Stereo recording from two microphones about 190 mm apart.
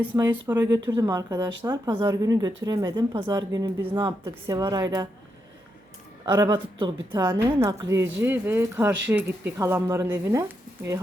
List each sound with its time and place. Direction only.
0.4 s speech: 15° right (ahead or behind)
6.2 s a woman's voice: 20° right (ahead or behind)